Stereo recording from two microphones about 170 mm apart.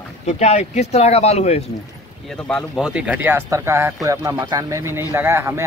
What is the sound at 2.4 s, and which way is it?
Speech, centre (ahead or behind).